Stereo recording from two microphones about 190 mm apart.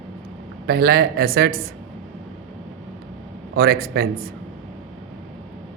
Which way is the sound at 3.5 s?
55° right (ahead or behind).